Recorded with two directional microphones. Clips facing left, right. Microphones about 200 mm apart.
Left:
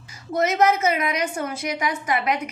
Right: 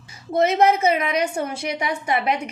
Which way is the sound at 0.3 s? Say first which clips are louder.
Right 2 dB; 30° right (ahead or behind).